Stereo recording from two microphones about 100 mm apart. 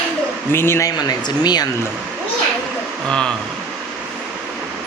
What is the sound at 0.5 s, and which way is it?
Speech, 25° left (ahead or behind).